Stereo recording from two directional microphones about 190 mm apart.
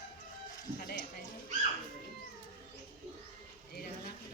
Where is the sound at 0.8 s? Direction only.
50° left (ahead or behind).